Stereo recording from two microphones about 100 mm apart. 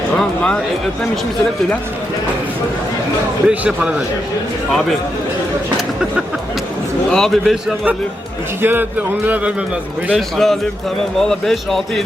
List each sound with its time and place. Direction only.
0.2 s speech: 10° left (ahead or behind)
3.4 s speech: 10° right (ahead or behind)
7.1 s speech: 5° left (ahead or behind)
8.6 s speech: 20° right (ahead or behind)
10.2 s speech: 5° left (ahead or behind)